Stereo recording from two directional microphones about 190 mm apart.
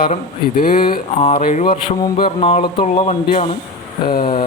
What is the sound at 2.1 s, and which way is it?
Speech, 25° left (ahead or behind).